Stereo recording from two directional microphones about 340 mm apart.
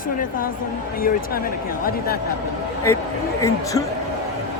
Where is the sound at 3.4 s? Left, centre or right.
Centre.